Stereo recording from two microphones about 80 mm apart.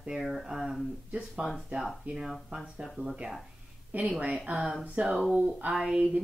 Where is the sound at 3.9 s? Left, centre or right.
Right.